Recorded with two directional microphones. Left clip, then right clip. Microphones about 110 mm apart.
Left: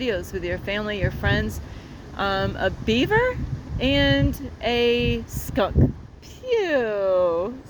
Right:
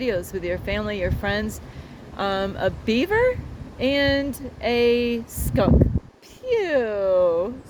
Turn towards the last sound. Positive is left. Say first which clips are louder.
# right 1 dB
turn(degrees=-20)  # may be behind; listen again after turning